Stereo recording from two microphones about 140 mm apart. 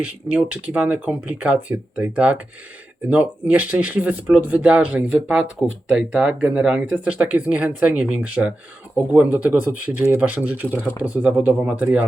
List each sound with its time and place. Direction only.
0.0 s speech: 10° right (ahead or behind)